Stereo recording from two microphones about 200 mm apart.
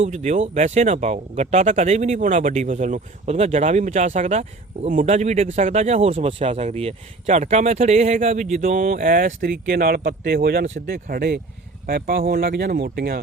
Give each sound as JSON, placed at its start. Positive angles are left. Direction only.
{"t": 0.0, "sound": "speech", "side_deg": -35}